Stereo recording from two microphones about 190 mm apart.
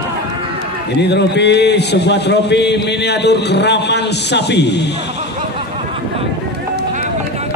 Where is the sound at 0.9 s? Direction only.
65° left (ahead or behind).